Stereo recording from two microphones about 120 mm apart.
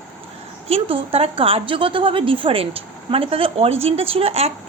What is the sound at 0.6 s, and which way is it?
A woman's voice, 55° right (ahead or behind).